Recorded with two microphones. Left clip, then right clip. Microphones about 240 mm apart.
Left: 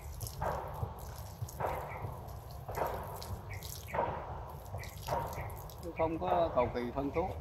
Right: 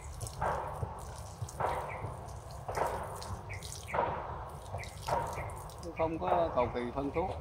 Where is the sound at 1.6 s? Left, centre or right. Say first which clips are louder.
Right 3 dB; centre.